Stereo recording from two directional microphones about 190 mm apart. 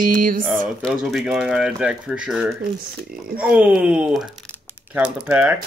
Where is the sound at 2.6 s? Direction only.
50° right (ahead or behind).